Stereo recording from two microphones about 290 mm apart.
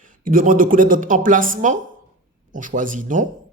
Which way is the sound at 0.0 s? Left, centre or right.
Right.